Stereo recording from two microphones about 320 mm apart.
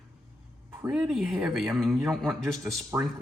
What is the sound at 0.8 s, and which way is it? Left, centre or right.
Speech, centre.